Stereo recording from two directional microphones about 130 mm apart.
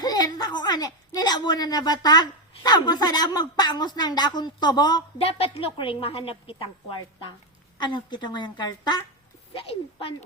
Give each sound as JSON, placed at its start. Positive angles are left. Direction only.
{"t": 0.0, "sound": "a woman's voice", "side_deg": 30}
{"t": 5.1, "sound": "a woman's voice", "side_deg": 50}
{"t": 7.8, "sound": "a woman's voice", "side_deg": 35}
{"t": 9.5, "sound": "a woman's voice", "side_deg": 45}